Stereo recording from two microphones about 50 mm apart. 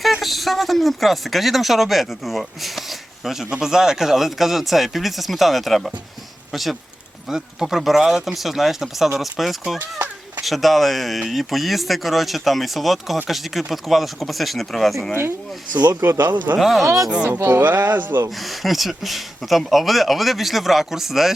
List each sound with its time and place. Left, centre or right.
0.0 s speech: centre
16.0 s speech: right
16.6 s speech: centre
17.6 s speech: right
18.3 s speech: centre